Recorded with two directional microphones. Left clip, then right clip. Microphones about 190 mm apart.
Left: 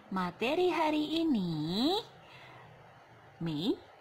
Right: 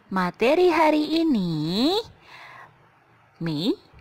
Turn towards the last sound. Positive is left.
turn(degrees=-45)  # may be behind; listen again after turning